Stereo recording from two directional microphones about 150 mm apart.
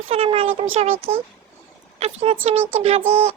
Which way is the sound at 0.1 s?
40° right (ahead or behind).